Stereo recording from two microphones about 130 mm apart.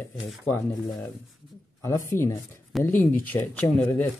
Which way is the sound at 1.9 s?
20° left (ahead or behind).